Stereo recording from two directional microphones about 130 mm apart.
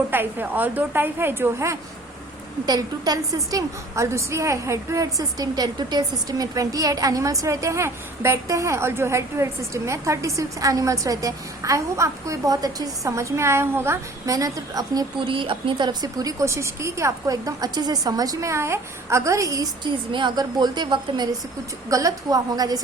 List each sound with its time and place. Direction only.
0.1 s a woman's voice: 15° right (ahead or behind)
15.2 s a woman's voice: 40° right (ahead or behind)